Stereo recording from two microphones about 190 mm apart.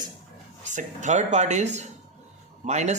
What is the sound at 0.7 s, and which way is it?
Speech, 40° right (ahead or behind).